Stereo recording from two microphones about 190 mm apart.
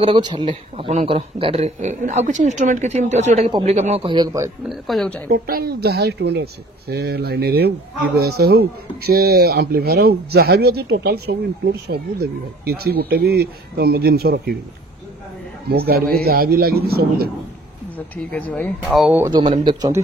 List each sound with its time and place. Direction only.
0.0 s speech: 25° right (ahead or behind)
4.6 s speech: centre (ahead or behind)
5.3 s speech: 50° right (ahead or behind)
15.7 s a man's voice: 55° right (ahead or behind)
17.9 s speech: 10° left (ahead or behind)
19.6 s speech: 20° right (ahead or behind)